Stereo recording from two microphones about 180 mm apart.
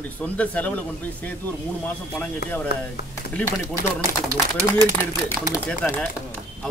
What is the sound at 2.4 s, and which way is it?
Speech, 65° left (ahead or behind).